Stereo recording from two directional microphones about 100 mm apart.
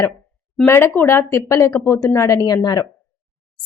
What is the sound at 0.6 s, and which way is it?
A woman's voice, 20° left (ahead or behind).